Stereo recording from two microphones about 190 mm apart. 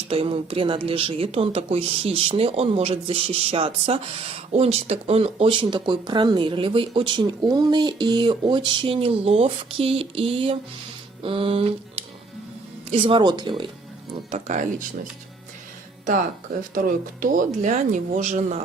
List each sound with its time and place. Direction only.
0.1 s speech: 30° right (ahead or behind)
14.3 s speech: 35° right (ahead or behind)
16.7 s speech: 45° right (ahead or behind)